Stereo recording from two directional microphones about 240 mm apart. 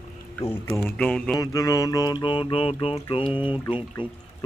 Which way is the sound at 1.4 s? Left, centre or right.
Centre.